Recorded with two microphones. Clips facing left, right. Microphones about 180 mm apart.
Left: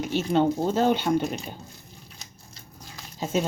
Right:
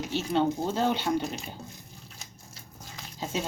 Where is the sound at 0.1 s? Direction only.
50° left (ahead or behind).